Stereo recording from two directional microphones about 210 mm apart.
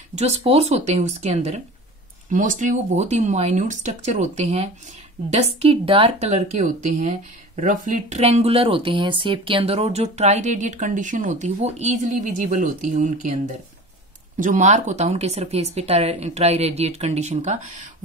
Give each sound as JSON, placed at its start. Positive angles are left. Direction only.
{"t": 0.1, "sound": "speech", "side_deg": -30}